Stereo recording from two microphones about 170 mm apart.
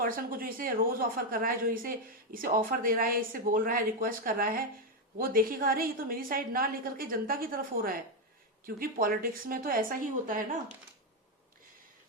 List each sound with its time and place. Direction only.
0.0 s speech: 55° right (ahead or behind)